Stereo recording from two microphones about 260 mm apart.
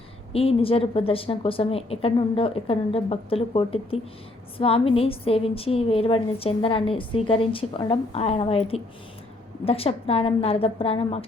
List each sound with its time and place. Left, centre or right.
0.3 s a woman's voice: left